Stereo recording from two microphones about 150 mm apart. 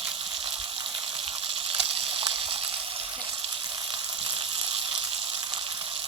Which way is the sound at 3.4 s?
35° right (ahead or behind).